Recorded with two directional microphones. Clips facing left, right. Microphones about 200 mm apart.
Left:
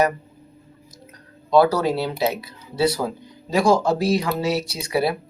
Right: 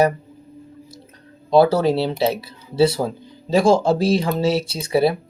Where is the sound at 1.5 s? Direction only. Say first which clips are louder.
Right 2 dB; 25° right (ahead or behind).